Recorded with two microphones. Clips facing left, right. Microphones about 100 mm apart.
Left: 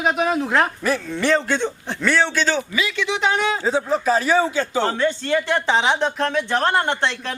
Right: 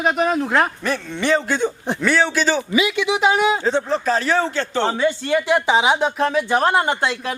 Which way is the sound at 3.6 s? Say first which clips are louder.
Even; 5° left (ahead or behind).